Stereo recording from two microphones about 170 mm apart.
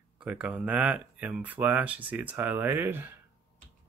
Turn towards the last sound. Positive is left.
turn(degrees=-10)  # may be behind; listen again after turning